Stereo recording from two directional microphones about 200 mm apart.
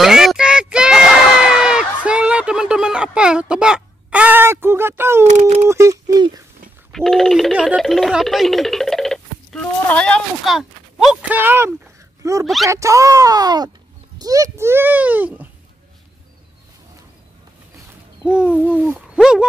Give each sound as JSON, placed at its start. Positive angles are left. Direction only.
{"t": 0.0, "sound": "a sound", "side_deg": 0}
{"t": 5.2, "sound": "speech", "side_deg": -35}
{"t": 5.7, "sound": "a sound", "side_deg": -15}
{"t": 6.9, "sound": "music", "side_deg": 0}
{"t": 12.2, "sound": "a child's voice", "side_deg": -15}
{"t": 18.2, "sound": "owl", "side_deg": -5}